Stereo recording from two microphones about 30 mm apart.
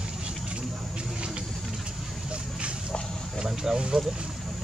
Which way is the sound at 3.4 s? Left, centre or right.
Centre.